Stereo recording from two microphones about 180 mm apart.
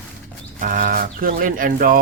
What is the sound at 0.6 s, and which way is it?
Speech, 45° right (ahead or behind).